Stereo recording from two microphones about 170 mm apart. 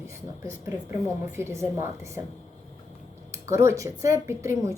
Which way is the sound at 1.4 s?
15° right (ahead or behind).